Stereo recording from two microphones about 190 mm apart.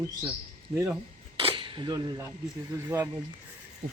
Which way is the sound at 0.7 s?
15° right (ahead or behind).